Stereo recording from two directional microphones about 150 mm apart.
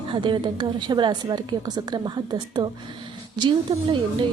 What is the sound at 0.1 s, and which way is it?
A woman's voice, 30° right (ahead or behind).